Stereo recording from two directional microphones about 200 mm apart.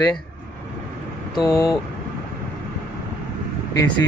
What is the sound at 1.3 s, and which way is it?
Speech, 20° left (ahead or behind).